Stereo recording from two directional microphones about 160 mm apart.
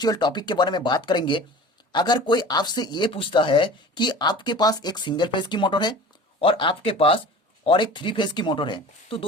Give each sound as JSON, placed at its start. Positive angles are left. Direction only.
{"t": 0.0, "sound": "speech", "side_deg": 25}